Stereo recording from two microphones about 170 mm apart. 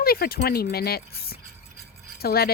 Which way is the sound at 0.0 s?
60° left (ahead or behind).